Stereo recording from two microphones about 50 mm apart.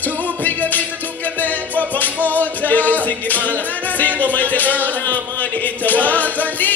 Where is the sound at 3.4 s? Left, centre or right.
Right.